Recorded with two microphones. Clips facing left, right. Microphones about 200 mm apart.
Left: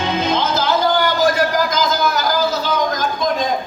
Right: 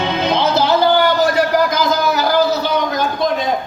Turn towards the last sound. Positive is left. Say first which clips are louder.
# right 2 dB
turn(degrees=-65)  # may be behind; listen again after turning